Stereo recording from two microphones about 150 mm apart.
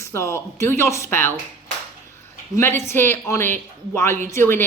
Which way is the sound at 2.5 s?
15° left (ahead or behind).